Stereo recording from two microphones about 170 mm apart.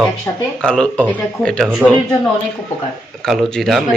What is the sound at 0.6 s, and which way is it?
A man's voice, 5° left (ahead or behind).